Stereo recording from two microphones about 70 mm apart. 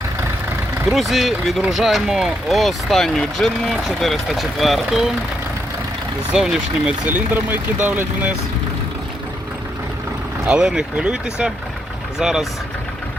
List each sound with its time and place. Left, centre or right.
0.9 s speech: centre
6.3 s speech: centre
7.1 s speech: right
10.4 s speech: centre